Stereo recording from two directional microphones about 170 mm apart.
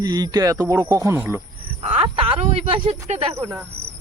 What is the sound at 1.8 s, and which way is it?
Speech, 40° right (ahead or behind).